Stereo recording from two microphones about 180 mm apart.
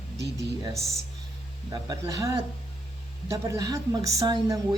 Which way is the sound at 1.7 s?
20° right (ahead or behind).